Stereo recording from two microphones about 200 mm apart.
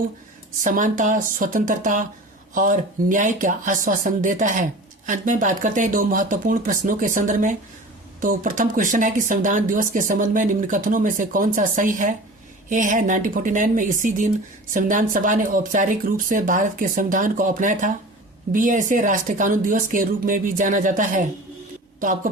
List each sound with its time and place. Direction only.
0.6 s speech: 40° right (ahead or behind)